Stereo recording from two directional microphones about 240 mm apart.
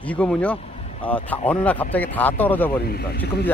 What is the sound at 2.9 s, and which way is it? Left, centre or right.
Speech, left.